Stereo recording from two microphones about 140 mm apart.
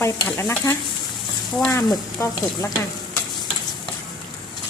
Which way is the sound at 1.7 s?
25° left (ahead or behind).